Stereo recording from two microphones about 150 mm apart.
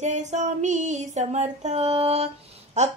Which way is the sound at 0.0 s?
50° right (ahead or behind).